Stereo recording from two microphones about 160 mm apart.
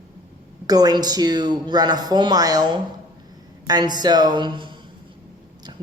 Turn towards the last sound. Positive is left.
turn(degrees=-30)  # may be behind; listen again after turning